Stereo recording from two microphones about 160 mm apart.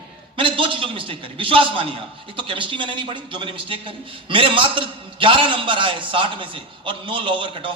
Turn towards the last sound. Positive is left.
turn(degrees=-30)  # may be behind; listen again after turning